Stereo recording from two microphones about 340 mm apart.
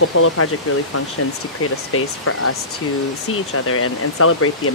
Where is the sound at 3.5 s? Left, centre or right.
Left.